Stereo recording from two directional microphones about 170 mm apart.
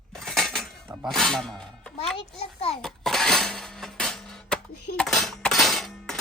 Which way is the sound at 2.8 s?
Centre (ahead or behind).